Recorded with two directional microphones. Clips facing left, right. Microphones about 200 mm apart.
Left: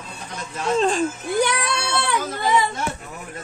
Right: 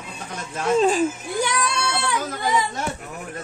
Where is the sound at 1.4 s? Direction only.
65° left (ahead or behind).